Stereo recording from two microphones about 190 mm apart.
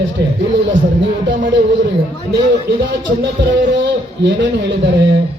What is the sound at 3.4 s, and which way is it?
A man's voice, 65° right (ahead or behind).